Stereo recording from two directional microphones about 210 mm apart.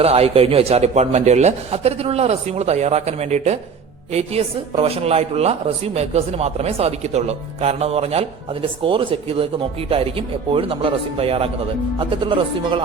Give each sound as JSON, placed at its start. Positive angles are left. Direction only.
{"t": 0.0, "sound": "a man's voice", "side_deg": -30}